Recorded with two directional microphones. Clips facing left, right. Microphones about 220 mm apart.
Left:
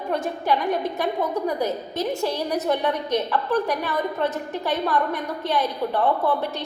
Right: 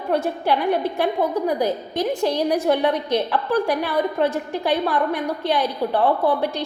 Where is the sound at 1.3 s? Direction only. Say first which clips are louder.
Right 3 dB; 10° right (ahead or behind).